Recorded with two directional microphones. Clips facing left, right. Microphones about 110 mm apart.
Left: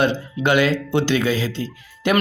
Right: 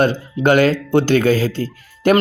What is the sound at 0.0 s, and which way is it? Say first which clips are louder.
Speech: right 4 dB; 45° right (ahead or behind).